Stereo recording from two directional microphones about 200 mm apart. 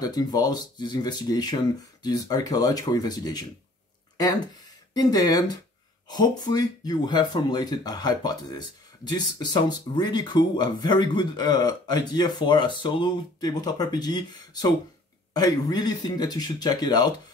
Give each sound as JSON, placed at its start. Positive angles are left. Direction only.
{"t": 0.0, "sound": "speech", "side_deg": 20}
{"t": 4.9, "sound": "speech", "side_deg": 20}